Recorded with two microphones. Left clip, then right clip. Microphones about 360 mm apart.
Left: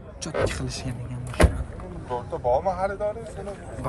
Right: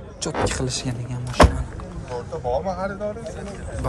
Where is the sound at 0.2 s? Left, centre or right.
Centre.